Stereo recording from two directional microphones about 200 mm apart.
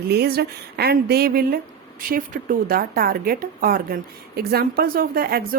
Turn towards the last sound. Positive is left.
turn(degrees=-50)  # may be behind; listen again after turning